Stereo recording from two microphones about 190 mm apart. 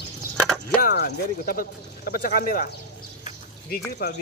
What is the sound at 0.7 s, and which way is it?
Speech, 55° left (ahead or behind).